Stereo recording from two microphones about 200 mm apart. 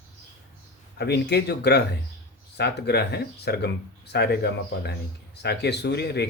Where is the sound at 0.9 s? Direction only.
55° left (ahead or behind).